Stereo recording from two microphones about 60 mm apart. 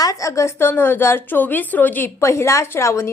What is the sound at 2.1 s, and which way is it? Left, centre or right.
Speech, left.